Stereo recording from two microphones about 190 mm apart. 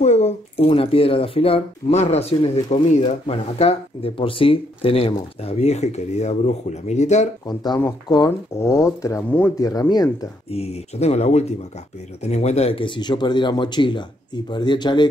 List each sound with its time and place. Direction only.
0.0 s speech: 35° left (ahead or behind)
7.4 s speech: 20° left (ahead or behind)
10.5 s speech: 35° left (ahead or behind)